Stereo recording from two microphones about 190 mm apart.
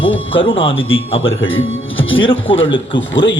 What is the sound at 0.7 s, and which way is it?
Speech, 90° left.